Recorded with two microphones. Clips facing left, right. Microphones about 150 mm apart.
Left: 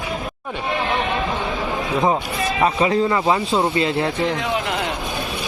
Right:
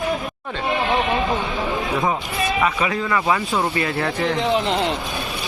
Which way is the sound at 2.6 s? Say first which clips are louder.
Left 7 dB; 30° left (ahead or behind).